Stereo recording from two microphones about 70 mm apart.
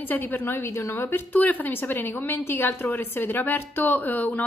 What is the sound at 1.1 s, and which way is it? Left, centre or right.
A woman's voice, left.